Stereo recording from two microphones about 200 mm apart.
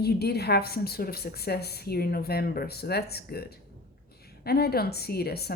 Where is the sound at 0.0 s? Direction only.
55° left (ahead or behind).